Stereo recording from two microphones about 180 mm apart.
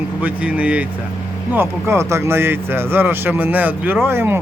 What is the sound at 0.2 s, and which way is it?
Speech, 10° right (ahead or behind).